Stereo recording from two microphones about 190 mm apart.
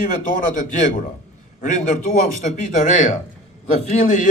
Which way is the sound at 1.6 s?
40° left (ahead or behind).